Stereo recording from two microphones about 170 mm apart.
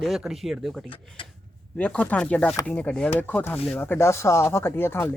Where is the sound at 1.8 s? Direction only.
10° left (ahead or behind).